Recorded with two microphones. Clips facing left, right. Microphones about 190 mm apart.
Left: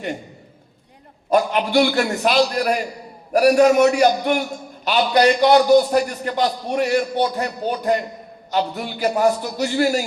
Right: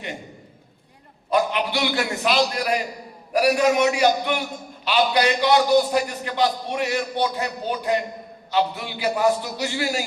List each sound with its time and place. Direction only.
1.3 s a man's voice: 45° left (ahead or behind)